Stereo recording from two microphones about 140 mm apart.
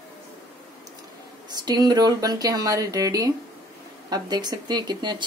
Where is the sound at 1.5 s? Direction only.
30° right (ahead or behind).